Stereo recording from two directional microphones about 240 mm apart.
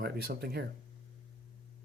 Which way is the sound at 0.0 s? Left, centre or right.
Right.